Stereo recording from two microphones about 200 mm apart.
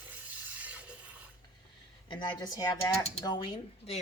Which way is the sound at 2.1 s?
20° left (ahead or behind).